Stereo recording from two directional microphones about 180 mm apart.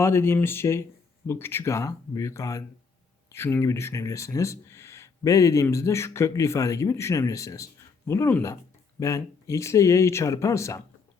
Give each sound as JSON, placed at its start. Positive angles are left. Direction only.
{"t": 0.0, "sound": "speech", "side_deg": 15}